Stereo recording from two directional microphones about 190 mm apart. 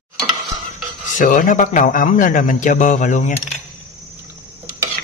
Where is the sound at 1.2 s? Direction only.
45° left (ahead or behind).